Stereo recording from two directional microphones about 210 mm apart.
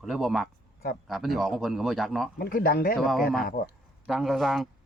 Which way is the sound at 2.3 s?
45° left (ahead or behind).